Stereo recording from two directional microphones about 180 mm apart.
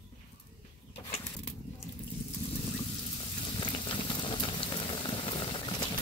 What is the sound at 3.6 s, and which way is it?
Boiling, 25° left (ahead or behind).